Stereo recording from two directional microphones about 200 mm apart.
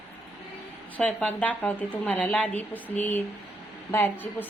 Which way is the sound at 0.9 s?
5° left (ahead or behind).